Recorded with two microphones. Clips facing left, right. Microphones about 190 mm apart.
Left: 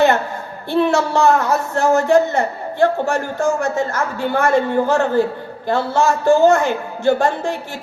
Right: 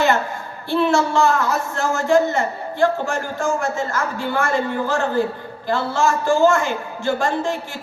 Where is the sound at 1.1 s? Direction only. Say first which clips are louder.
Left 3 dB; 60° left (ahead or behind).